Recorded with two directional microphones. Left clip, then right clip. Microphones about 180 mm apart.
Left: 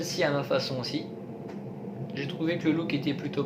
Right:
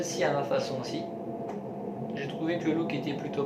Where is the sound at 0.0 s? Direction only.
60° left (ahead or behind).